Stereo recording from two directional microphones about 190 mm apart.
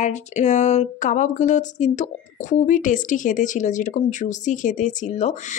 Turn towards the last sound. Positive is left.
turn(degrees=40)  # may be behind; listen again after turning